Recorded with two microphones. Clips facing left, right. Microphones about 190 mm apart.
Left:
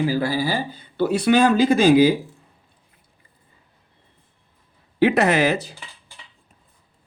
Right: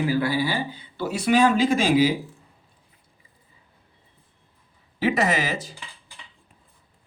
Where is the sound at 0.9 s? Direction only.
60° left (ahead or behind).